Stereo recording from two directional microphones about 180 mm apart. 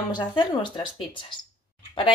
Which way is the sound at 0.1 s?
25° left (ahead or behind).